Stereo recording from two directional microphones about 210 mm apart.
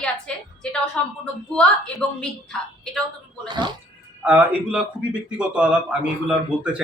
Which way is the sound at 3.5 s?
20° right (ahead or behind).